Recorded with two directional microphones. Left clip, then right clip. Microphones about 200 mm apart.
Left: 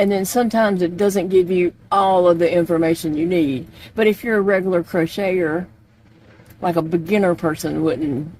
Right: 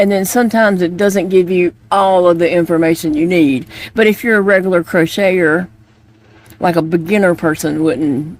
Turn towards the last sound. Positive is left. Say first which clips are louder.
# right 6 dB
turn(degrees=-30)  # may be behind; listen again after turning